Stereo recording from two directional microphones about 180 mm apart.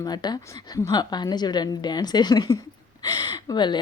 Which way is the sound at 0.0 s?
25° left (ahead or behind).